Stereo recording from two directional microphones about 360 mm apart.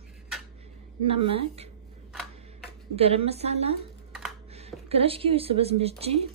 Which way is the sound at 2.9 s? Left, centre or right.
Centre.